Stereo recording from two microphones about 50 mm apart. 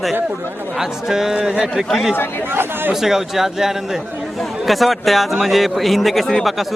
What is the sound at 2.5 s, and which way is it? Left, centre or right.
Speech, right.